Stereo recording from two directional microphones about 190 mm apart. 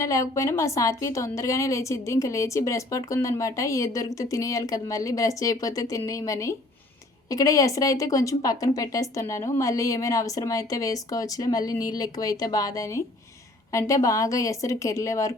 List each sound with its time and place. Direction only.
0.0 s a woman's voice: 15° left (ahead or behind)